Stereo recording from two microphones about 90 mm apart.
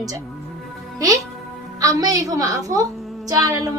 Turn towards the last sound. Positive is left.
turn(degrees=-40)  # may be behind; listen again after turning